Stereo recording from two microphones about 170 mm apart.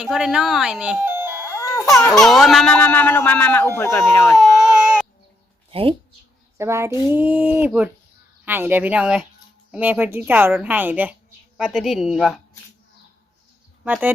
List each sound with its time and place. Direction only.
0.0 s speech: 5° right (ahead or behind)
2.1 s speech: centre (ahead or behind)
4.4 s baby cry: centre (ahead or behind)
5.7 s speech: 35° right (ahead or behind)
6.6 s a woman's voice: 15° right (ahead or behind)
13.8 s a woman's voice: 10° right (ahead or behind)